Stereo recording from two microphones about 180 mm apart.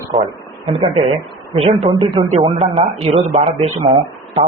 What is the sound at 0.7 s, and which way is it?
Speech, 30° right (ahead or behind).